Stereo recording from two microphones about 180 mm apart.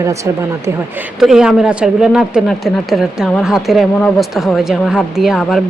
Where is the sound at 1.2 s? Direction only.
5° right (ahead or behind).